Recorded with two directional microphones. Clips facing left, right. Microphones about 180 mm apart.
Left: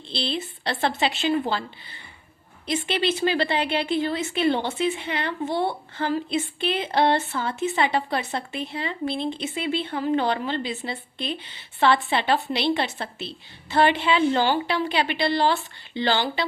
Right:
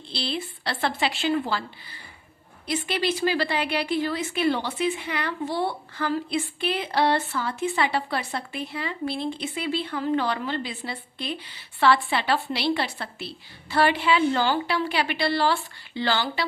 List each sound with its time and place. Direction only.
0.1 s a woman's voice: 25° left (ahead or behind)